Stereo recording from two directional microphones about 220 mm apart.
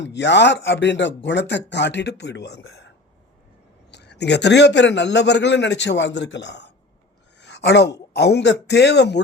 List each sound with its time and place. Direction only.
0.0 s a man's voice: 55° left (ahead or behind)
3.9 s a man's voice: 50° left (ahead or behind)
7.3 s a sound: 50° left (ahead or behind)
8.1 s a man's voice: 50° left (ahead or behind)